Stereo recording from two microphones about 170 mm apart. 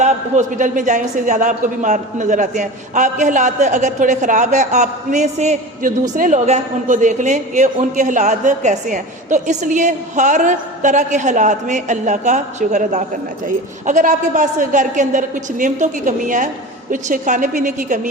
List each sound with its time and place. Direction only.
0.0 s a man's voice: 45° right (ahead or behind)